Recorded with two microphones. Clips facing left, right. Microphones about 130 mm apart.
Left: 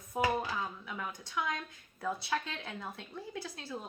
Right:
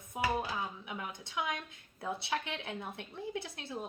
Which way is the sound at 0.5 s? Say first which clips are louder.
Even; 20° right (ahead or behind).